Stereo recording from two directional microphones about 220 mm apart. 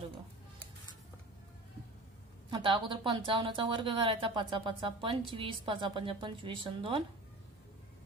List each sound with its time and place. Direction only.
2.5 s a woman's voice: 20° right (ahead or behind)